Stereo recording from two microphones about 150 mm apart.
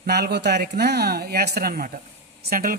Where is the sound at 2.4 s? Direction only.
70° right (ahead or behind).